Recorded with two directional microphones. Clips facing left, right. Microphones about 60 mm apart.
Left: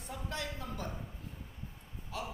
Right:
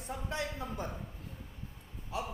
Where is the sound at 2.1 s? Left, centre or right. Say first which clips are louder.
Right 3 dB; right.